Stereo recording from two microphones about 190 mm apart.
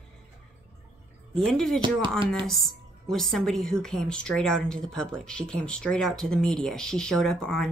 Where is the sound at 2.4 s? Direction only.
Centre (ahead or behind).